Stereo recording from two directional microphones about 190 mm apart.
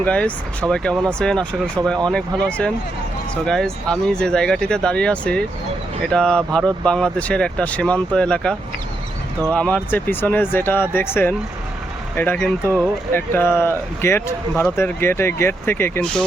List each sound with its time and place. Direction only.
0.0 s speech: 5° left (ahead or behind)